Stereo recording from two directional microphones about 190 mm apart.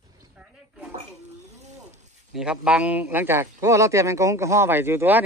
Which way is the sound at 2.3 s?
5° right (ahead or behind).